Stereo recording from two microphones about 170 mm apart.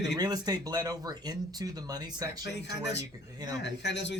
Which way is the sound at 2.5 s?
90° left.